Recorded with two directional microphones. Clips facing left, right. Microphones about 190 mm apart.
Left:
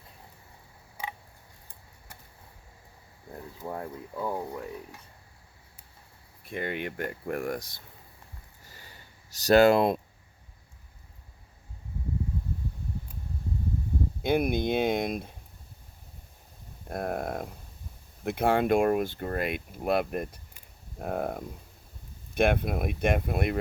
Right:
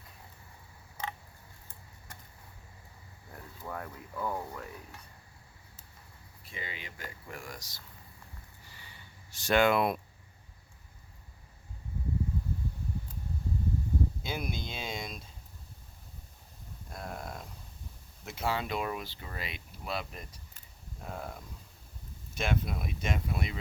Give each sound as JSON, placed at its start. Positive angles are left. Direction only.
{"t": 1.0, "sound": "frog", "side_deg": 10}
{"t": 3.3, "sound": "speech", "side_deg": 25}
{"t": 6.4, "sound": "speech", "side_deg": 55}
{"t": 8.6, "sound": "a sound", "side_deg": 40}
{"t": 14.2, "sound": "speech", "side_deg": 55}
{"t": 16.9, "sound": "speech", "side_deg": 55}